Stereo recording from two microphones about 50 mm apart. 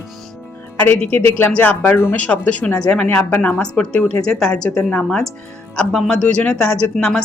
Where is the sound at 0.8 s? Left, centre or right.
Left.